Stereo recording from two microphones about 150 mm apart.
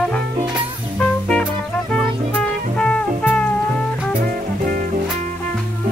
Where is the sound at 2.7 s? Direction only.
5° left (ahead or behind).